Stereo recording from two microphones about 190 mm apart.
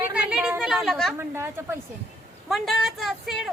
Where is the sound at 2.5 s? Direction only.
Centre (ahead or behind).